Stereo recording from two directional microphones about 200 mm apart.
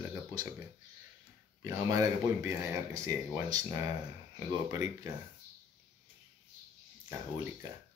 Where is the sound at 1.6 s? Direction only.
20° right (ahead or behind).